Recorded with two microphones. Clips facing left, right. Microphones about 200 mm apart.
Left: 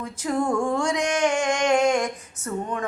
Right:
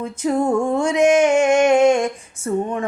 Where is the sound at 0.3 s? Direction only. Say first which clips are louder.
Right 5 dB; 25° right (ahead or behind).